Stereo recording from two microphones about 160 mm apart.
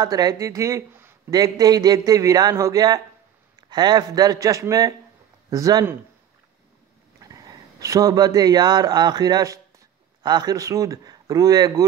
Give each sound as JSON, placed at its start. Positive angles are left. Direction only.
{"t": 0.0, "sound": "speech", "side_deg": -25}
{"t": 7.2, "sound": "speech", "side_deg": -20}